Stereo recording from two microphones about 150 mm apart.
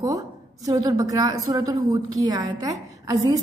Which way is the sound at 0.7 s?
20° right (ahead or behind).